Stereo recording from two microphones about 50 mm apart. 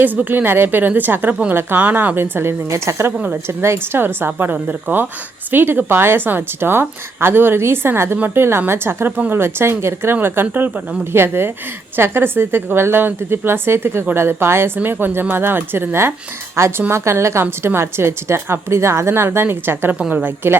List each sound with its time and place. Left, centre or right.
0.3 s speech: right
2.6 s a woman's voice: right
3.4 s a woman's voice: right
4.7 s a woman's voice: right
10.4 s speech: right
11.1 s a woman's voice: right
16.6 s a woman's voice: right
20.0 s a woman's voice: right
20.2 s a woman's voice: right